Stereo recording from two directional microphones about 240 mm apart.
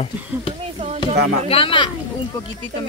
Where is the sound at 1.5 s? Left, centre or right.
Left.